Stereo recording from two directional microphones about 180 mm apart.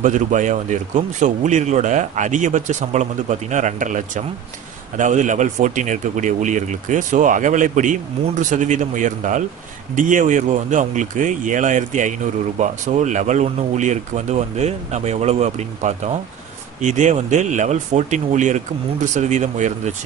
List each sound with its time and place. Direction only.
0.0 s speech: 45° right (ahead or behind)